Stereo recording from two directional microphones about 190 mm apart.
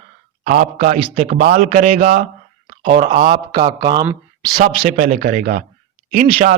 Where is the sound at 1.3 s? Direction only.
45° right (ahead or behind); by 4.1 s 20° right (ahead or behind).